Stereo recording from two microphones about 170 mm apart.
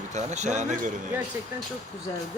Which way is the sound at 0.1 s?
45° right (ahead or behind).